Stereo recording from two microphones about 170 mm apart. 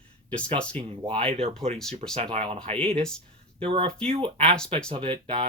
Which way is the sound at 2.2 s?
35° right (ahead or behind).